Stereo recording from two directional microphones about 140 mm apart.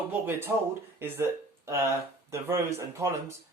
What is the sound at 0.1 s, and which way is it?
Speech, 15° right (ahead or behind).